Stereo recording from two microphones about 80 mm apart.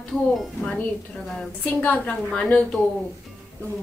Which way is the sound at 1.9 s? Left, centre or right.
Centre.